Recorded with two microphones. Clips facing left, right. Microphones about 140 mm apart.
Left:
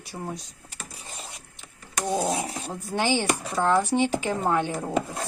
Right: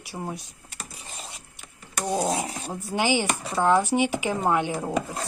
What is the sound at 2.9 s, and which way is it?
A woman's voice, 15° right (ahead or behind).